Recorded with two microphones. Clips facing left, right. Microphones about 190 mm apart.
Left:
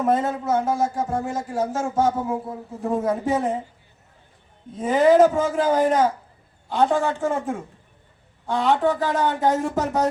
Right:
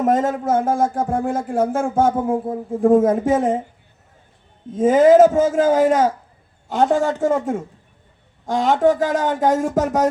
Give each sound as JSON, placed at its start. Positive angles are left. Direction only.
{"t": 0.0, "sound": "speech", "side_deg": -45}
{"t": 4.7, "sound": "speech", "side_deg": -45}